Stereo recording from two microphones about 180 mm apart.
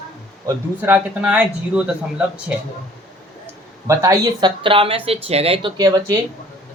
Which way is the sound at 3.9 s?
20° right (ahead or behind).